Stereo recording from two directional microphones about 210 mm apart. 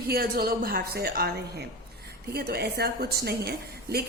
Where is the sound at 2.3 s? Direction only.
50° right (ahead or behind).